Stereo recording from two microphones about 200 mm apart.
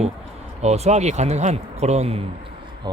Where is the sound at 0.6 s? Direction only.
35° right (ahead or behind).